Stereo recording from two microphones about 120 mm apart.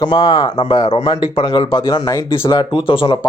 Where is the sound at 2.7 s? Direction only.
45° left (ahead or behind).